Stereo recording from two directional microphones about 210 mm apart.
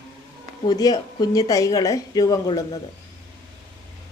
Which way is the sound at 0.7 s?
20° left (ahead or behind).